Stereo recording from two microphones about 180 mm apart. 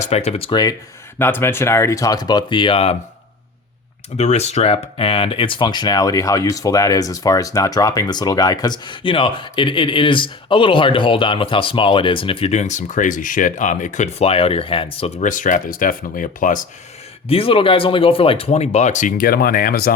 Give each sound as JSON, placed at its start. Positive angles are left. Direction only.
{"t": 0.0, "sound": "speech", "side_deg": 35}
{"t": 1.2, "sound": "speech", "side_deg": 10}
{"t": 4.2, "sound": "speech", "side_deg": 35}
{"t": 17.2, "sound": "speech", "side_deg": 30}